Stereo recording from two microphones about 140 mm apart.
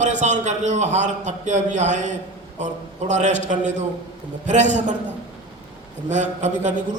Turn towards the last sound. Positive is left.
turn(degrees=-60)  # may be behind; listen again after turning